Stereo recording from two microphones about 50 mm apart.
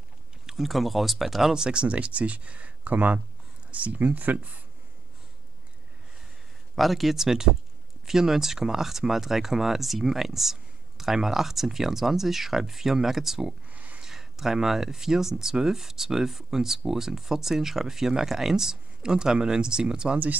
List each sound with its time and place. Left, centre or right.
0.5 s speech: centre; by 4.5 s right
6.7 s speech: centre
13.7 s a sound: right
14.0 s speech: centre